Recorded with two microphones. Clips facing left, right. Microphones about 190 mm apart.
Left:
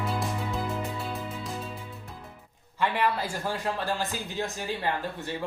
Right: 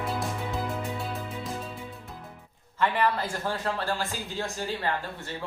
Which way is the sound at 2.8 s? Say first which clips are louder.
Right 1 dB; 10° left (ahead or behind).